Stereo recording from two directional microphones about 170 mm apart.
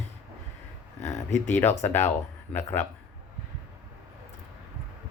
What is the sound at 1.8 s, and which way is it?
Speech, 15° left (ahead or behind).